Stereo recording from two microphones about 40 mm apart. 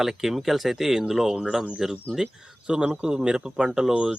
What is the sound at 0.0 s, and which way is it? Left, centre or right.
Speech, centre.